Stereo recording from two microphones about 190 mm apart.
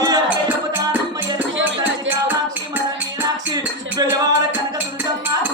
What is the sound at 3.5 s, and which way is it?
Music, 20° right (ahead or behind).